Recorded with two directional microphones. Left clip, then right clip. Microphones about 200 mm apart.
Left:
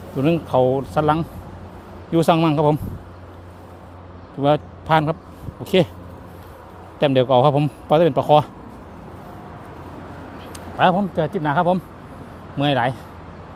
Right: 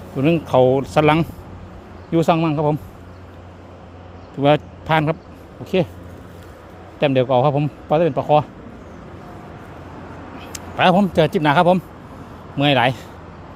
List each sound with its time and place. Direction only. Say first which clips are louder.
0.2 s speech: right 2 dB; 5° right (ahead or behind); by 1.3 s 20° right (ahead or behind)
2.0 s a man's voice: even; centre (ahead or behind)
4.4 s speech: right 2 dB; 10° right (ahead or behind)
7.0 s a man's voice: left 1 dB; centre (ahead or behind)
10.5 s speech: right 2 dB; 20° right (ahead or behind)